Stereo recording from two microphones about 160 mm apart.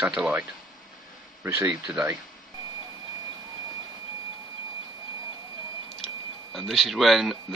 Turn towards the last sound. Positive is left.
turn(degrees=0)  # may be behind; listen again after turning